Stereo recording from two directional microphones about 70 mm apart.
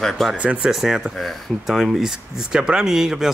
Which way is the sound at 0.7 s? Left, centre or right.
Centre.